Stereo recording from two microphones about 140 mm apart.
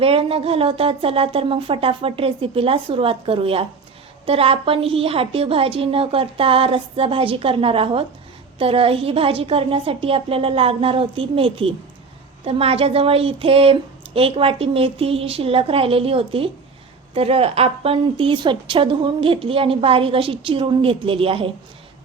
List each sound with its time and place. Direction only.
0.0 s a woman's voice: 40° right (ahead or behind)